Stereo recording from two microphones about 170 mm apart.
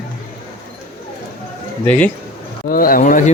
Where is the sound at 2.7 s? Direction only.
55° left (ahead or behind).